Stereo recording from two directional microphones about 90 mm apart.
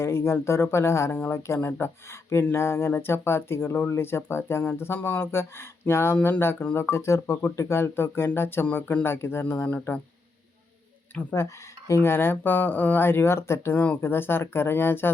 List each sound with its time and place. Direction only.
0.0 s speech: 30° left (ahead or behind)
11.1 s speech: 20° left (ahead or behind)
11.4 s speech: 30° left (ahead or behind)
13.7 s speech: 15° left (ahead or behind)
14.0 s speech: 25° left (ahead or behind)